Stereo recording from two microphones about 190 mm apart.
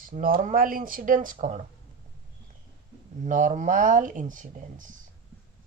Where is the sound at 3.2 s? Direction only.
45° right (ahead or behind).